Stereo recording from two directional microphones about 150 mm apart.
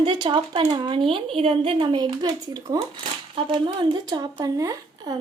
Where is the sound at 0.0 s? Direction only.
35° right (ahead or behind).